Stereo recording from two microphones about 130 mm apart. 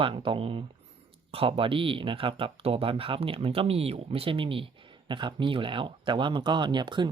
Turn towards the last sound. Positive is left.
turn(degrees=-35)  # may be behind; listen again after turning